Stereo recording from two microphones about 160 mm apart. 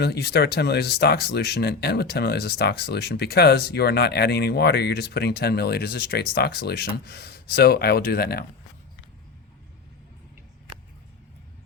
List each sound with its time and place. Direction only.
0.0 s speech: 90° left